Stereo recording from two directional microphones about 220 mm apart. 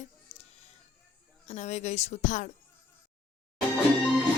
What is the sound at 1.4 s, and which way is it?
Speech, 30° left (ahead or behind).